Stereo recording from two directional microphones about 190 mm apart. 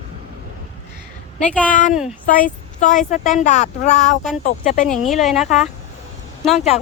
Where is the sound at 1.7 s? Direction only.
45° left (ahead or behind).